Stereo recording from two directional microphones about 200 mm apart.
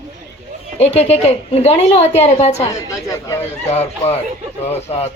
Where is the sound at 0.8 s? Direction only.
30° left (ahead or behind).